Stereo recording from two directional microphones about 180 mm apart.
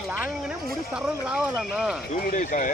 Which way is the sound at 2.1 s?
45° left (ahead or behind).